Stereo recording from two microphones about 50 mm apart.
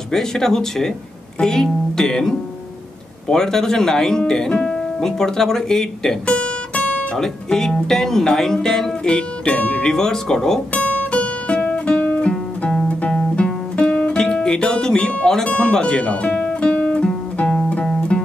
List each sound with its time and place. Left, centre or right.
0.1 s speech: centre
6.3 s guitar: left
7.2 s speech: centre; by 9.8 s left
9.8 s speech: centre
10.7 s guitar: left
13.1 s music: centre
15.4 s guitar: centre